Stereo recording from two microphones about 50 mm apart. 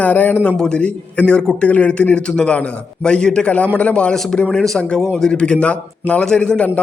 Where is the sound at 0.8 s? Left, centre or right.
Left.